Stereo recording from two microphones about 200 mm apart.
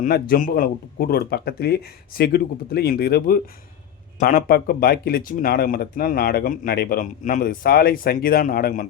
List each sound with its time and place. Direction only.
0.0 s speech: 45° left (ahead or behind)